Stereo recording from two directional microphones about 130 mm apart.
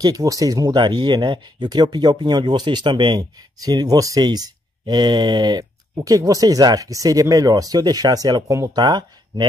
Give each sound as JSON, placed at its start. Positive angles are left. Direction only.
{"t": 0.0, "sound": "speech", "side_deg": -25}